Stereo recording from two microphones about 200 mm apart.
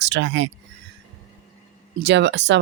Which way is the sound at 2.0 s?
60° right (ahead or behind).